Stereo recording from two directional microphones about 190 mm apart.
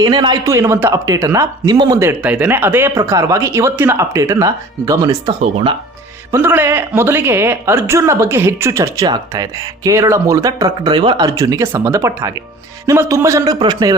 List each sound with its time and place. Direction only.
0.0 s speech: 20° right (ahead or behind)
5.4 s speech: 30° right (ahead or behind)
6.3 s speech: 10° right (ahead or behind)